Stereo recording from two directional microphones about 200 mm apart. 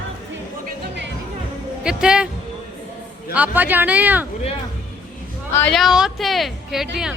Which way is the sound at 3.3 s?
10° right (ahead or behind).